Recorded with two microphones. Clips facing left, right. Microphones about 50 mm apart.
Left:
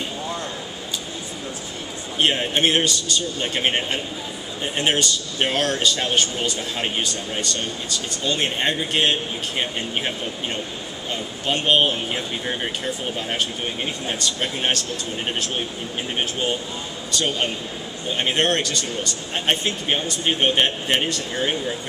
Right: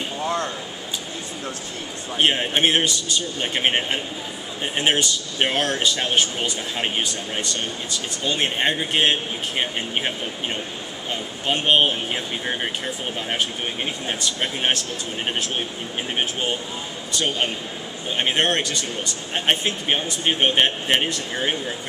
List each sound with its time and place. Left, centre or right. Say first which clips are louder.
2.1 s speech: even; right
18.1 s speech: even; right